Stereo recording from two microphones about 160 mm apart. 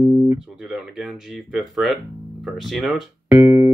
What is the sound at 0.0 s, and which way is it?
Guitar, 25° right (ahead or behind).